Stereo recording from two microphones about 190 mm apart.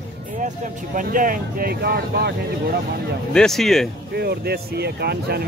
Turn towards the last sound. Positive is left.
turn(degrees=-55)  # may be behind; listen again after turning